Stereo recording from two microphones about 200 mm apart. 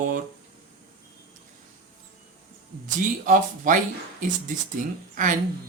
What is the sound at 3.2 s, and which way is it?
Speech, 40° right (ahead or behind).